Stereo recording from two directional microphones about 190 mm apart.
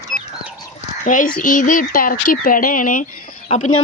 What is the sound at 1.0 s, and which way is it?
Speech, 45° left (ahead or behind).